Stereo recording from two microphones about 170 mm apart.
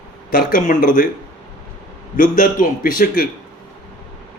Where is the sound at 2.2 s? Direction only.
55° left (ahead or behind).